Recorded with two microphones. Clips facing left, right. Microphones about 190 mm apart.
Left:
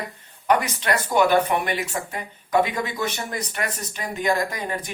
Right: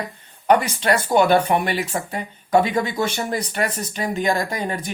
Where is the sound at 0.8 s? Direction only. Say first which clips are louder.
Right 2 dB; 30° right (ahead or behind).